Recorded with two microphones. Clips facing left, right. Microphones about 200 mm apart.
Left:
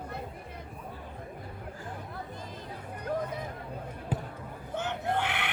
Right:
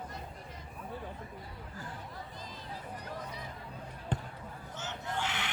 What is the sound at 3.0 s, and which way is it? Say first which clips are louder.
Vehicle: left 15 dB; 55° left (ahead or behind).